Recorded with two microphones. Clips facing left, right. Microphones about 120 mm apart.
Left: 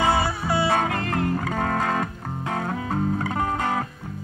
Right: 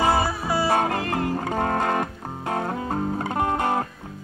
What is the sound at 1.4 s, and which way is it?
Music, 20° right (ahead or behind).